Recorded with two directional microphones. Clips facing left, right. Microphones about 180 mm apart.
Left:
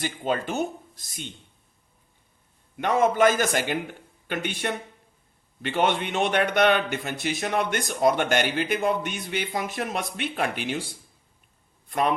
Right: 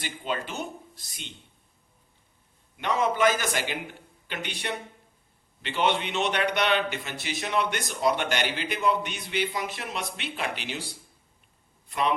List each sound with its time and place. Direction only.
0.0 s a man's voice: 45° left (ahead or behind)
2.7 s a man's voice: 50° left (ahead or behind)
11.9 s a man's voice: 50° left (ahead or behind)